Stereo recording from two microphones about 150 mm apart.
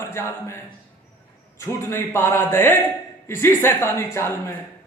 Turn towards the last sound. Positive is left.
turn(degrees=20)  # may be behind; listen again after turning